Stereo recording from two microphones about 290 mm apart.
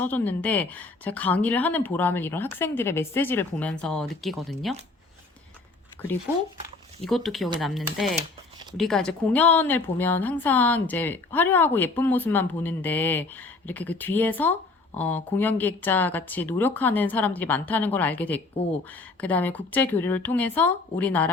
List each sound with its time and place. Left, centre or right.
0.0 s a woman's voice: centre
6.0 s a woman's voice: centre